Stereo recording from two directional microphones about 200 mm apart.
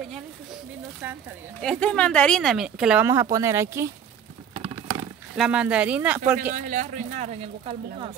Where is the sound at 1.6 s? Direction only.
5° left (ahead or behind); by 3.9 s 15° right (ahead or behind).